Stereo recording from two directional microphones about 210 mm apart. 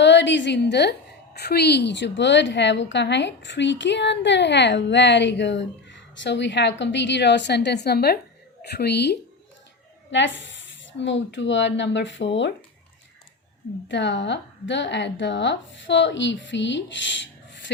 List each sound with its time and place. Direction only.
0.0 s a woman's voice: 60° left (ahead or behind)
13.8 s a woman's voice: 60° left (ahead or behind)